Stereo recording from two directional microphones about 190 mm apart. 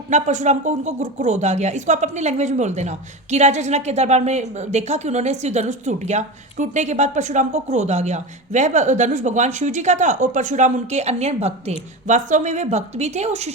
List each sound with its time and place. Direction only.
0.1 s a woman's voice: 40° right (ahead or behind)